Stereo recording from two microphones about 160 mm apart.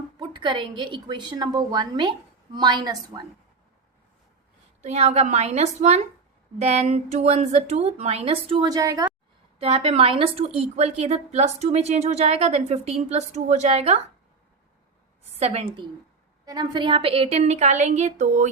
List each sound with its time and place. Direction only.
0.2 s a woman's voice: 30° right (ahead or behind)
4.8 s a woman's voice: 45° right (ahead or behind)
8.7 s a woman's voice: 20° right (ahead or behind)
9.6 s a woman's voice: 35° right (ahead or behind)
15.4 s a woman's voice: 40° right (ahead or behind)